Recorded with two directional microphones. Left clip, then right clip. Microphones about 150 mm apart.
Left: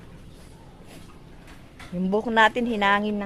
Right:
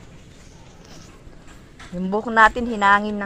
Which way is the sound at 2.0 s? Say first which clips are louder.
Right 4 dB; 15° left (ahead or behind).